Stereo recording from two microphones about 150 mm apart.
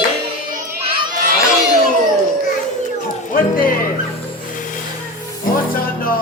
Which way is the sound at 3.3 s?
70° left (ahead or behind).